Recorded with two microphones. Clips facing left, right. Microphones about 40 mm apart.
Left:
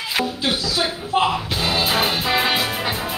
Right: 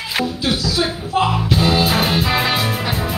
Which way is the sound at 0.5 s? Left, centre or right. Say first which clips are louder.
Right 3 dB; centre.